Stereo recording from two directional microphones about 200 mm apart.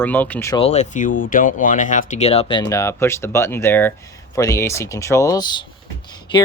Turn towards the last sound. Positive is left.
turn(degrees=25)  # may be behind; listen again after turning